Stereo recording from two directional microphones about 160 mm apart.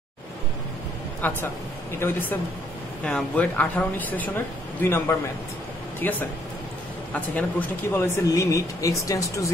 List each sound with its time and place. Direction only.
1.2 s speech: 10° left (ahead or behind)